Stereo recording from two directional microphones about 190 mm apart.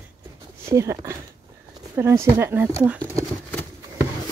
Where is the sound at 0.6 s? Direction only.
15° right (ahead or behind).